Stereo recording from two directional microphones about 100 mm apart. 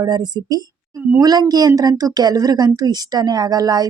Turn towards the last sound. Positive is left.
turn(degrees=-40)  # may be behind; listen again after turning